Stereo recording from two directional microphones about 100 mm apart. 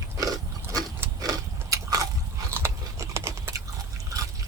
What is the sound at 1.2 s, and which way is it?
Biting, 40° right (ahead or behind).